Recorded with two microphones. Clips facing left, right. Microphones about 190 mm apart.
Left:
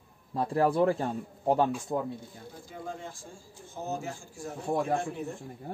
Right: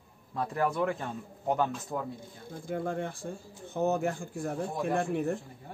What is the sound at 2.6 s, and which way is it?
Speech, 55° right (ahead or behind).